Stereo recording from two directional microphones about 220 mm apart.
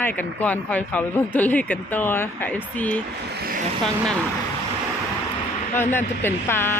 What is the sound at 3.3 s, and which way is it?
Speech, 45° right (ahead or behind).